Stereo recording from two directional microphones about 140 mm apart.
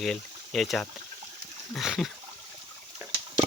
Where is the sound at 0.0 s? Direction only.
Centre (ahead or behind).